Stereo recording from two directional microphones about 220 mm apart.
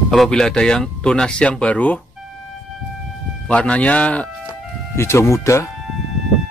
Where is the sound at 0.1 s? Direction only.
Centre (ahead or behind).